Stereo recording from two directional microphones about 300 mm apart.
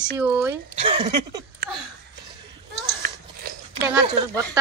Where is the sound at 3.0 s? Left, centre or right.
Right.